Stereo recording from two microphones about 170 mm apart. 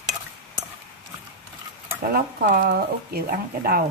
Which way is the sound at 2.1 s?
60° right (ahead or behind).